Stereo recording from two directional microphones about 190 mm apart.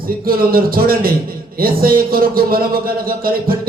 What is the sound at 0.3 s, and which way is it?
A man's voice, 50° right (ahead or behind).